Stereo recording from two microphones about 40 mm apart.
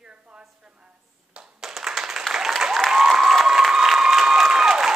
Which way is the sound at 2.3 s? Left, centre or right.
Centre.